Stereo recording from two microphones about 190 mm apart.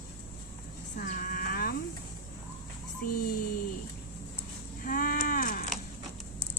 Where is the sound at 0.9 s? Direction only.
50° left (ahead or behind).